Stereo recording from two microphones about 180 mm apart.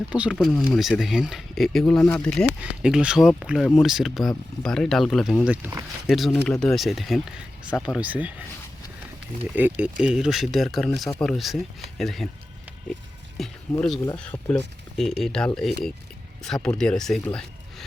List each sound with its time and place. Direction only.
0.1 s speech: 5° right (ahead or behind)
5.5 s speech: 10° right (ahead or behind)
6.1 s speech: centre (ahead or behind)
9.6 s speech: 10° right (ahead or behind)
13.3 s speech: centre (ahead or behind)
14.0 s speech: 15° left (ahead or behind)
14.5 s speech: centre (ahead or behind)